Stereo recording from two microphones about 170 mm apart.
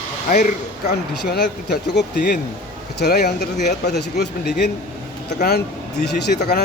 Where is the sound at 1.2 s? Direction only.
80° left.